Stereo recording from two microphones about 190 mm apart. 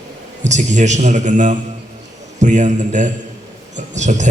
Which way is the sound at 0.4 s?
40° right (ahead or behind).